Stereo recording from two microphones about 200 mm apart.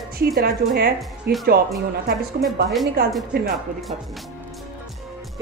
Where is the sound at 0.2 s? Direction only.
50° right (ahead or behind).